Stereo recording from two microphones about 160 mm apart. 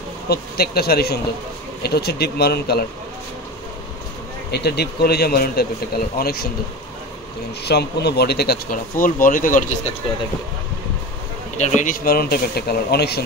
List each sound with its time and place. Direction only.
0.3 s speech: 75° left (ahead or behind)
4.5 s speech: 90° left; by 6.5 s 75° left (ahead or behind)
7.6 s speech: 90° left; by 9.8 s 55° left (ahead or behind)
11.5 s speech: 45° left (ahead or behind); by 13.2 s 90° left